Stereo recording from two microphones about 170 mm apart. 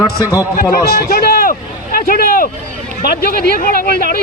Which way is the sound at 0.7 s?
60° left (ahead or behind).